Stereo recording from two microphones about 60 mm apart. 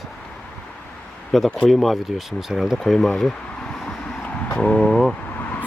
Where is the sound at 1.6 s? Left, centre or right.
Centre.